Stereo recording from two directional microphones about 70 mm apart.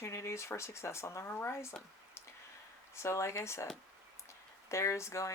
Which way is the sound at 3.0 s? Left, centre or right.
Left.